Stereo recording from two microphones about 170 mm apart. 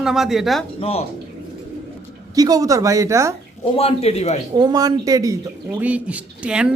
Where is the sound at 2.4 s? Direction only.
20° right (ahead or behind).